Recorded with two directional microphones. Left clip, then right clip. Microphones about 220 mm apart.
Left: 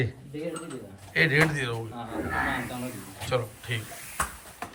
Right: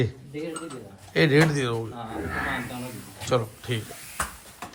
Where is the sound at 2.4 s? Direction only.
Centre (ahead or behind).